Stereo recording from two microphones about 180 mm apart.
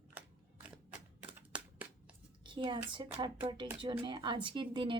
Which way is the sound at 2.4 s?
25° right (ahead or behind).